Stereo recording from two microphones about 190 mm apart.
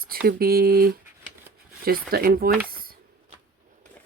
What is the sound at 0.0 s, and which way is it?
Speech, 50° right (ahead or behind).